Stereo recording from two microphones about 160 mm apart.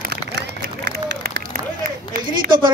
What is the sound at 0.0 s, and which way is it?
Run, 90° right.